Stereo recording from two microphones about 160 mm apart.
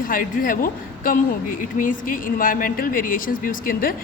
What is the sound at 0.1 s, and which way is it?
Speech, 60° left (ahead or behind).